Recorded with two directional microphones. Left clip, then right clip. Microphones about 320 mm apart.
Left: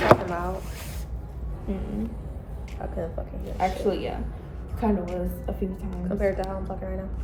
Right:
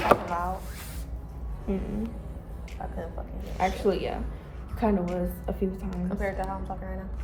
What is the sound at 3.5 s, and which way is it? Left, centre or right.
Speech, right.